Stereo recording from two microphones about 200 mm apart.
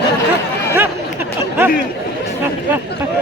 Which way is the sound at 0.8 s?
10° right (ahead or behind).